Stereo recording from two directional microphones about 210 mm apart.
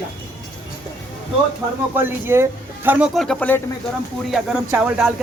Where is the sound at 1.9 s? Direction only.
10° right (ahead or behind).